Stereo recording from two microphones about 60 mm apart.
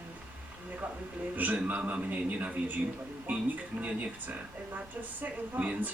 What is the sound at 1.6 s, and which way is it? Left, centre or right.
Speech, right.